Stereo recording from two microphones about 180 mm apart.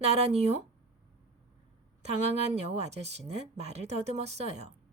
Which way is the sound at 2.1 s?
35° right (ahead or behind).